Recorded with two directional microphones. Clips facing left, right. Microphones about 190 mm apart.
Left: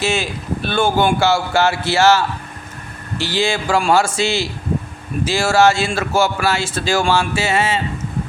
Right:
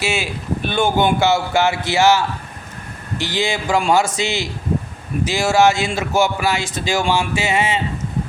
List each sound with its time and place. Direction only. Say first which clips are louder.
0.0 s speech: left 2 dB; 10° right (ahead or behind)